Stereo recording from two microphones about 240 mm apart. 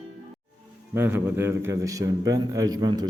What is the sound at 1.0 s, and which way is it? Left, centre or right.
A man's voice, centre.